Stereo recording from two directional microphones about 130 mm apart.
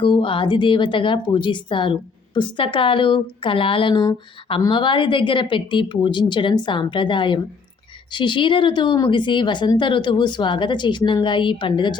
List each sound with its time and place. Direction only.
0.0 s speech: 40° left (ahead or behind)